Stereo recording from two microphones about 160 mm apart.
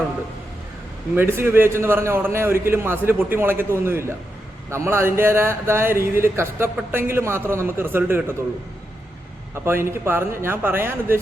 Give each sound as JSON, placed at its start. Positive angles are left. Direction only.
{"t": 1.1, "sound": "a man's voice", "side_deg": -15}
{"t": 9.6, "sound": "a man's voice", "side_deg": -15}